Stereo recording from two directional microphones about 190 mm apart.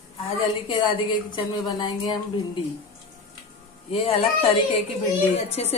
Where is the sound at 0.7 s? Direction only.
25° left (ahead or behind).